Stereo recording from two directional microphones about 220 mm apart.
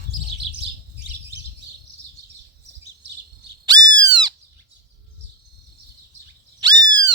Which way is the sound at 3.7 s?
20° right (ahead or behind).